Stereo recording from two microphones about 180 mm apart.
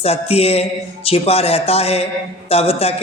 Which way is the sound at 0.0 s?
35° left (ahead or behind).